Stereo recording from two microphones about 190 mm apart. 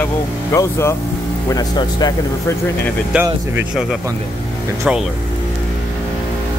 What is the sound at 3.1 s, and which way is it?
Speech, 5° right (ahead or behind).